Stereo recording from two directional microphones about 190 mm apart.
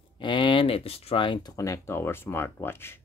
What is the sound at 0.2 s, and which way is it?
Speech, 25° left (ahead or behind).